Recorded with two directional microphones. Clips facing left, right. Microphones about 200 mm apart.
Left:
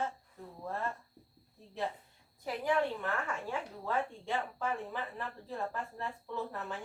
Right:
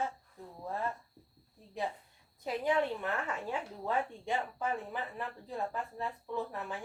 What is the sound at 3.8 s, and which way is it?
Speech, 15° right (ahead or behind).